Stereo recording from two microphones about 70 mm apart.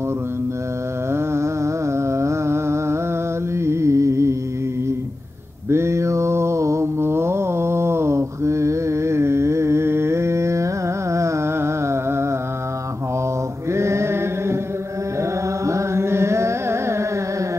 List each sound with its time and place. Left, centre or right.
1.1 s music: right
5.7 s mantra: right
13.7 s mantra: right
15.6 s carnatic music: right